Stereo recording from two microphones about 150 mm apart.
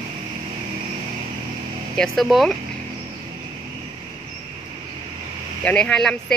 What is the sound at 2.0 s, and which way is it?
Speech, centre (ahead or behind).